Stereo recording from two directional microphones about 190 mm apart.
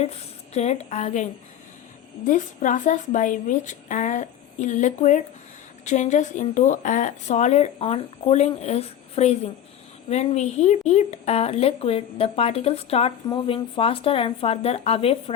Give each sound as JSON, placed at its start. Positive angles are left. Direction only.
{"t": 0.0, "sound": "speech", "side_deg": 35}